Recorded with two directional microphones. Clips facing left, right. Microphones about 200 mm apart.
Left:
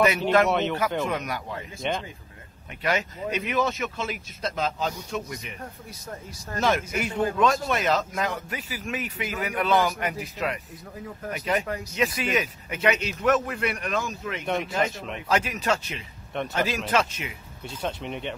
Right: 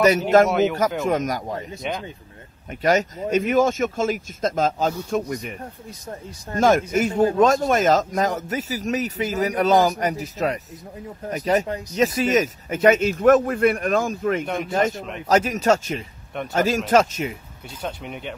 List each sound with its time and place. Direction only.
0.5 s speech: 5° right (ahead or behind)
0.7 s speech: 45° right (ahead or behind)
1.8 s speech: centre (ahead or behind)
2.8 s speech: 45° right (ahead or behind)
6.6 s speech: 40° right (ahead or behind)
14.4 s speech: centre (ahead or behind)
15.1 s speech: 40° right (ahead or behind)
17.8 s speech: 5° right (ahead or behind)